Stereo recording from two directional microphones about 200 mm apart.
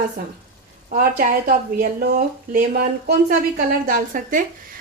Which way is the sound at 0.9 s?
40° right (ahead or behind).